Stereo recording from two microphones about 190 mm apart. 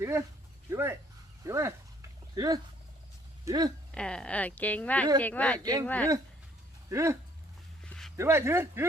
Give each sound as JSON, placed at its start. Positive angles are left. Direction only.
{"t": 0.0, "sound": "speech", "side_deg": -15}
{"t": 1.5, "sound": "a sound", "side_deg": -15}
{"t": 3.9, "sound": "speech", "side_deg": 5}
{"t": 5.5, "sound": "speech", "side_deg": -20}
{"t": 5.8, "sound": "speech", "side_deg": 10}
{"t": 6.9, "sound": "speech", "side_deg": -15}
{"t": 7.9, "sound": "a sound", "side_deg": 0}
{"t": 8.1, "sound": "speech", "side_deg": -15}